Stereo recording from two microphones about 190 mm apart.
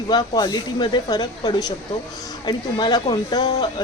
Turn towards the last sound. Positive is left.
turn(degrees=20)  # may be behind; listen again after turning